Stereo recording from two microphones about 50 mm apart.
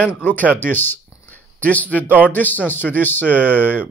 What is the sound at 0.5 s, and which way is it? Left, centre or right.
Speech, left.